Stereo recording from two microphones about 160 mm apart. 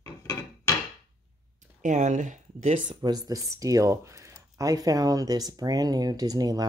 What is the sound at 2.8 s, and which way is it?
Speech, 25° right (ahead or behind).